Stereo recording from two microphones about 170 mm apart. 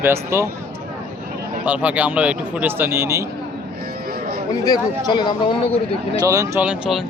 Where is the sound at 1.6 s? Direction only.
10° right (ahead or behind).